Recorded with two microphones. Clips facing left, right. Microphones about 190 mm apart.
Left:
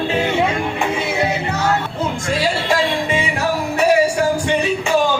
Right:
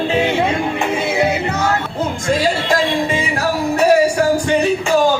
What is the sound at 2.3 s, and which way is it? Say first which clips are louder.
Music: right 3 dB; 45° right (ahead or behind).